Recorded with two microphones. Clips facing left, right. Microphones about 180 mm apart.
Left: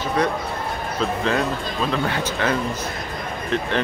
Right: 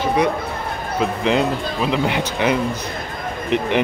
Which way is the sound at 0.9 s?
15° right (ahead or behind).